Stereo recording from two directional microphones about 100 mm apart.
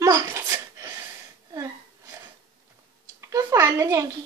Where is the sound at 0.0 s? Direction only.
40° right (ahead or behind).